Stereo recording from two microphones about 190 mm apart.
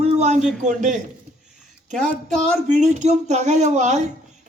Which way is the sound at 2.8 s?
35° right (ahead or behind).